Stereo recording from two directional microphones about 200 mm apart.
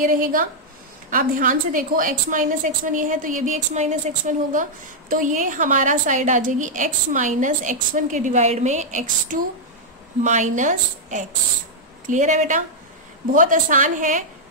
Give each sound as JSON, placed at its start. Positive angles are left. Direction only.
{"t": 0.0, "sound": "a woman's voice", "side_deg": -45}